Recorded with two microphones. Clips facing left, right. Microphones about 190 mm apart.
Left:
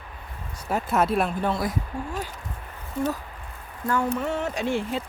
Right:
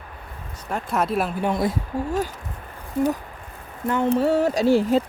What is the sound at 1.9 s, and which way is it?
Speech, 40° right (ahead or behind).